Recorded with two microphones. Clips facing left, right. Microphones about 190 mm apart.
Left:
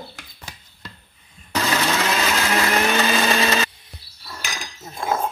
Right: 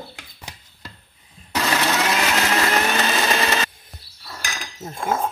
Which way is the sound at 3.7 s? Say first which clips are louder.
Even; 45° right (ahead or behind).